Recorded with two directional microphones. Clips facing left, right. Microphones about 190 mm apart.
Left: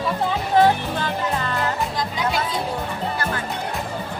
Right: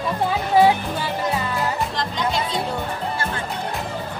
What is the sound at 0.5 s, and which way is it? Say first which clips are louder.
Music: right 1 dB; 10° right (ahead or behind).